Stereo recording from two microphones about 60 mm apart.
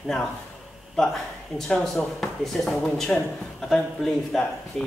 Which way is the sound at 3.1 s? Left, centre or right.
Centre.